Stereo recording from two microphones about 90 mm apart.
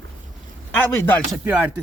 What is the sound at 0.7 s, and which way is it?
Speech, 20° left (ahead or behind).